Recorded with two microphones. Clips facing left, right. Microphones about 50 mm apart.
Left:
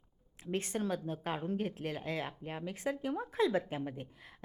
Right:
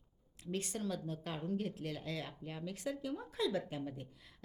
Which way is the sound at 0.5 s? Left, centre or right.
Left.